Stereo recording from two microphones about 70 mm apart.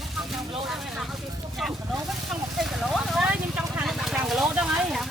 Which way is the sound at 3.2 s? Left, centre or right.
Right.